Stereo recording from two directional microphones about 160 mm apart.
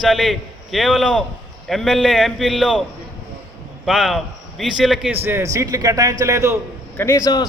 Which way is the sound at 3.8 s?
Centre (ahead or behind).